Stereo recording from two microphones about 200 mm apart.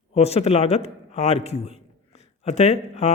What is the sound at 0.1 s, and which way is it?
A man's voice, 30° left (ahead or behind).